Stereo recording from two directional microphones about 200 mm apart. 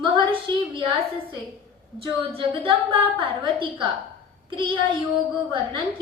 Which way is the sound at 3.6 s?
25° right (ahead or behind).